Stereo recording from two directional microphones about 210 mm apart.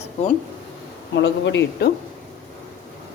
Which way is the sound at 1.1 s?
60° left (ahead or behind).